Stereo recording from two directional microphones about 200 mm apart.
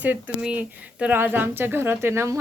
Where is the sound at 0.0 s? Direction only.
10° right (ahead or behind).